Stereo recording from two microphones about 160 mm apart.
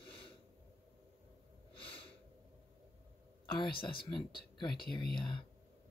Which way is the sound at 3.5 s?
30° left (ahead or behind).